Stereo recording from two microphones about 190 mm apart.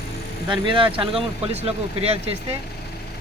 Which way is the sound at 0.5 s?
25° right (ahead or behind).